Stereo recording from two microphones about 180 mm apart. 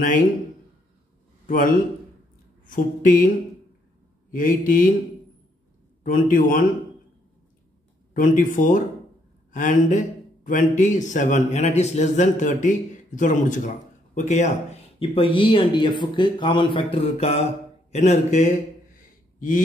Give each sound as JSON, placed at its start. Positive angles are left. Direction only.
{"t": 1.5, "sound": "speech", "side_deg": 50}
{"t": 4.3, "sound": "speech", "side_deg": 50}
{"t": 6.0, "sound": "speech", "side_deg": 50}
{"t": 8.1, "sound": "speech", "side_deg": 45}
{"t": 15.0, "sound": "speech", "side_deg": 30}
{"t": 18.9, "sound": "a sound", "side_deg": 50}